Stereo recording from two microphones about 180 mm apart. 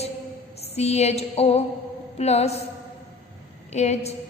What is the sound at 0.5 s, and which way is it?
Mantra, 35° left (ahead or behind).